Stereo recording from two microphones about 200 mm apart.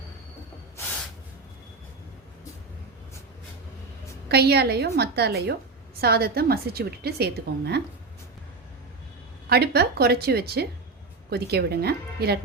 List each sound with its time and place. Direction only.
4.3 s a woman's voice: 55° right (ahead or behind)
9.5 s a woman's voice: 55° right (ahead or behind)